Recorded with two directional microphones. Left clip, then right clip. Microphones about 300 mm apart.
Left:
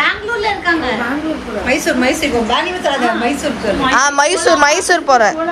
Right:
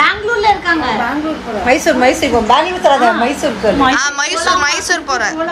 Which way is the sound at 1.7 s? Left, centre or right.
Right.